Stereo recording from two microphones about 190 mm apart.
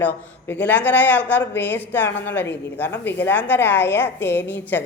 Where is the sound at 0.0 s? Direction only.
10° left (ahead or behind).